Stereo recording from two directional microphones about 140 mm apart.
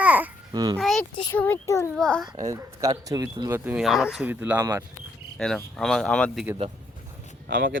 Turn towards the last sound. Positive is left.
turn(degrees=-90)